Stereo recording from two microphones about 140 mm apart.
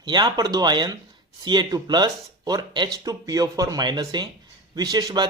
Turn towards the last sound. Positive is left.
turn(degrees=-30)  # may be behind; listen again after turning